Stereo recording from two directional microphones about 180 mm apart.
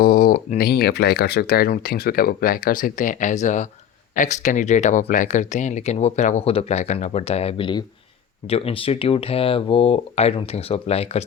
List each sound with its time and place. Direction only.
0.0 s speech: 50° left (ahead or behind); by 11.3 s 35° left (ahead or behind)